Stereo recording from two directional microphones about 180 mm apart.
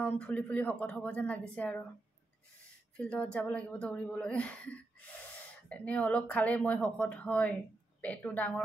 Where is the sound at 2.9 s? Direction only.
5° left (ahead or behind).